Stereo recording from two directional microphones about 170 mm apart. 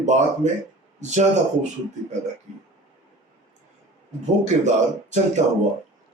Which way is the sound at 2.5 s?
45° right (ahead or behind).